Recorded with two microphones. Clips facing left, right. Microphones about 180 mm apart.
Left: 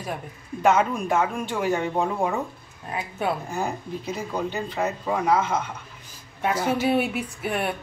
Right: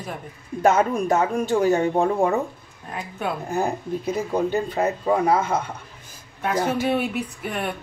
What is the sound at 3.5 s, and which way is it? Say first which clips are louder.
Speech: right 4 dB; 50° right (ahead or behind).